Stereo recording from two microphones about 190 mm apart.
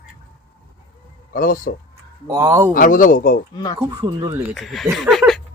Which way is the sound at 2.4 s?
15° right (ahead or behind).